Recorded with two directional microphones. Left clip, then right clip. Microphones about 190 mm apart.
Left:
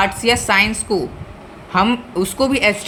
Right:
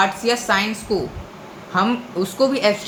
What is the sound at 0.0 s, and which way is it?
A woman's voice, 45° left (ahead or behind).